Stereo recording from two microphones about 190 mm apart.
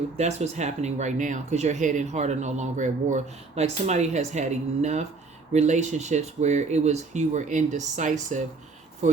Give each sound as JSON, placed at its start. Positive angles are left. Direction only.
{"t": 0.2, "sound": "speech", "side_deg": -35}